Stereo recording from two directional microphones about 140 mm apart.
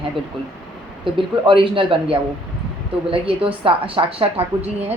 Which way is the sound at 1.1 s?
40° right (ahead or behind).